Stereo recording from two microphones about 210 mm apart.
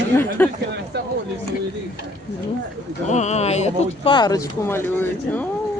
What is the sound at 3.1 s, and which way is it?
Speech, 35° left (ahead or behind).